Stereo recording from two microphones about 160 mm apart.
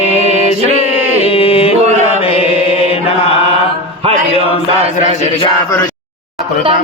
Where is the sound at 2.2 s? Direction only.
35° left (ahead or behind).